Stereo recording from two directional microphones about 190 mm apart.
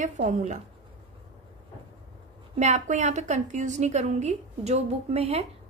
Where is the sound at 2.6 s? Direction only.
40° right (ahead or behind).